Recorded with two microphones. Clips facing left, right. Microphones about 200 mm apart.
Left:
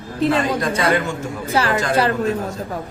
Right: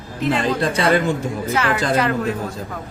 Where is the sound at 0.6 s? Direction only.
30° right (ahead or behind).